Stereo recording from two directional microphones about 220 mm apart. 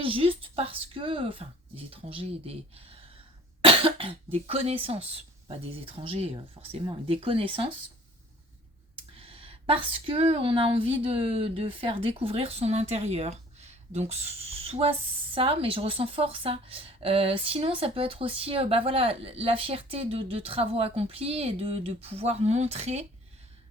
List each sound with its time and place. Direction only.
0.0 s a woman's voice: 25° right (ahead or behind)
9.1 s a woman's voice: 25° right (ahead or behind)